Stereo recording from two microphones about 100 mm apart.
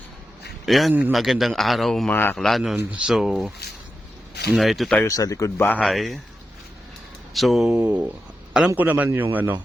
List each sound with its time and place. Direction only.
0.6 s a man's voice: centre (ahead or behind)
2.0 s a man's voice: 20° left (ahead or behind)
2.3 s a man's voice: 5° left (ahead or behind)
2.7 s a man's voice: 10° right (ahead or behind)
4.5 s a man's voice: centre (ahead or behind)
5.0 s speech: 35° left (ahead or behind)
5.5 s a man's voice: 20° left (ahead or behind)
5.8 s a man's voice: centre (ahead or behind)
7.3 s a man's voice: centre (ahead or behind)
7.7 s a man's voice: 20° right (ahead or behind)